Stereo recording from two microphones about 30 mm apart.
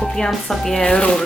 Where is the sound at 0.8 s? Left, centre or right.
Left.